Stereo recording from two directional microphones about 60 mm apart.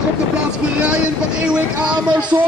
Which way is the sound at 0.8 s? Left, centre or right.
Centre.